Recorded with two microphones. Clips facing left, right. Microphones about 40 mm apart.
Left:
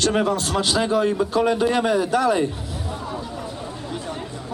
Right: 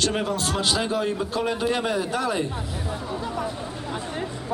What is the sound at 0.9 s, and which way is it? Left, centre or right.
Speech, left.